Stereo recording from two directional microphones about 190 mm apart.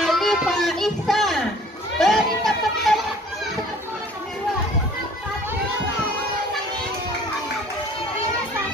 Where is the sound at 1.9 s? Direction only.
Centre (ahead or behind).